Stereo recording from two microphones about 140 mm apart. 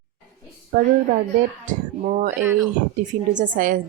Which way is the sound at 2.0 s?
60° right (ahead or behind).